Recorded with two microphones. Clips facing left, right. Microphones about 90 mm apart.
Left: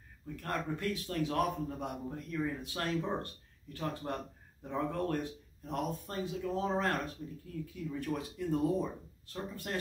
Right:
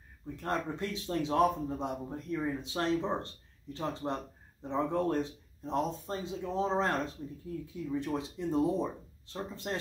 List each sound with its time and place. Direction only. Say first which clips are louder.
0.4 s a man's voice: right 2 dB; 25° right (ahead or behind)